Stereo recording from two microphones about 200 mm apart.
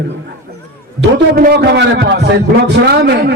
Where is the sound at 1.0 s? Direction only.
50° right (ahead or behind).